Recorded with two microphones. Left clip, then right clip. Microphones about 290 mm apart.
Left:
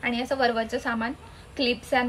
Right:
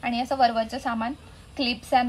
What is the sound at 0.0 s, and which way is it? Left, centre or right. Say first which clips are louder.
A woman's voice: right 2 dB; centre.